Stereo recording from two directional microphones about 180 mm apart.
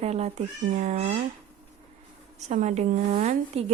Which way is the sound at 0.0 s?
35° right (ahead or behind).